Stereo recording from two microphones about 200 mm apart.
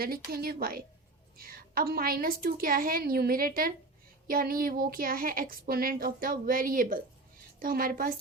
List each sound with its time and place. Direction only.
0.0 s a woman's voice: 50° right (ahead or behind)